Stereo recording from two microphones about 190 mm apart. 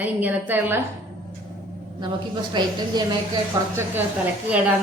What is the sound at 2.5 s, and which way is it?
A woman's voice, 20° right (ahead or behind).